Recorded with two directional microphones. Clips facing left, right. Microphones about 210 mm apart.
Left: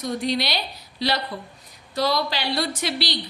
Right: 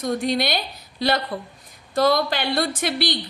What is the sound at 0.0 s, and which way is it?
A woman's voice, 50° right (ahead or behind).